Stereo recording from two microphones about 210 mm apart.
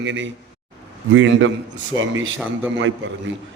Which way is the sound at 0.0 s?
60° right (ahead or behind).